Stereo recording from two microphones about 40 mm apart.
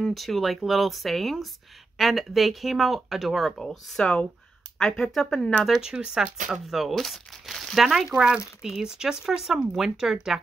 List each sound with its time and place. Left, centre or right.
0.1 s speech: centre
3.5 s speech: centre
5.8 s speech: centre
6.6 s speech: centre
7.8 s speech: centre